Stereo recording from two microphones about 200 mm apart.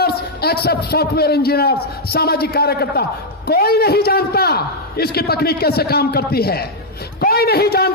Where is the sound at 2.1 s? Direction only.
50° left (ahead or behind).